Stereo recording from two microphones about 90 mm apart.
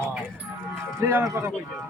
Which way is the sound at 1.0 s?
25° right (ahead or behind).